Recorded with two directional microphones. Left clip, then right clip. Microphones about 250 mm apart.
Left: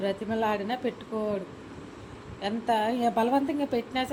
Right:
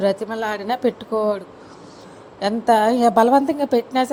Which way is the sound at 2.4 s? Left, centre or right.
Right.